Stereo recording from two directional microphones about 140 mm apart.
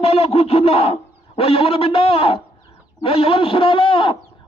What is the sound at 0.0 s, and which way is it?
A man's voice, 50° left (ahead or behind).